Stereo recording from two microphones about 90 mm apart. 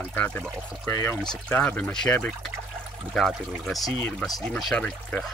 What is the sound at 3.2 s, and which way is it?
Speech, centre (ahead or behind).